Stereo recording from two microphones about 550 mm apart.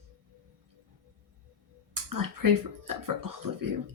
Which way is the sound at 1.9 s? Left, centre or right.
Right.